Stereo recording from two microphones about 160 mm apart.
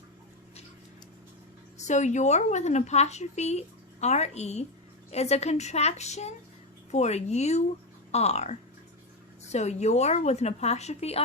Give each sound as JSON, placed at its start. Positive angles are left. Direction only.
{"t": 1.8, "sound": "speech", "side_deg": 45}